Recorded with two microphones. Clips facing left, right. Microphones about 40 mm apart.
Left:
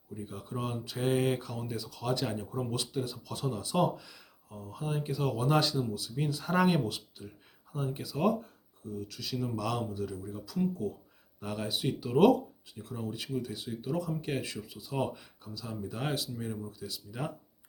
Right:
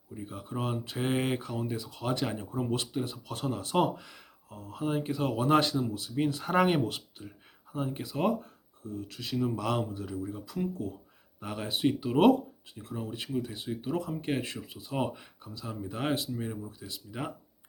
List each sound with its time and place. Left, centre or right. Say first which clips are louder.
0.3 s speech: right 3 dB; right